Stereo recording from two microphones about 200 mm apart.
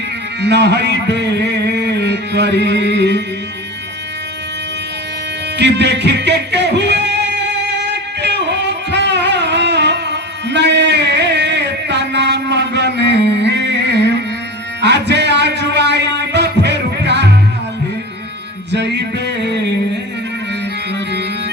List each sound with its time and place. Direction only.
0.4 s a man's voice: 60° right (ahead or behind)
5.5 s music: 60° right (ahead or behind)
14.8 s a sound: 60° right (ahead or behind)
18.7 s music: 60° right (ahead or behind)